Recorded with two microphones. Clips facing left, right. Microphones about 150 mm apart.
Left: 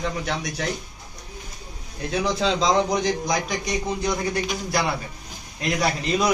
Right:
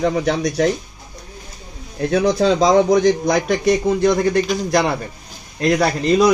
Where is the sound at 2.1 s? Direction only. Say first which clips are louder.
Right 7 dB; 50° right (ahead or behind).